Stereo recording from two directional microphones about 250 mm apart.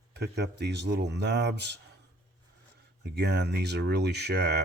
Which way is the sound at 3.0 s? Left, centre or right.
Right.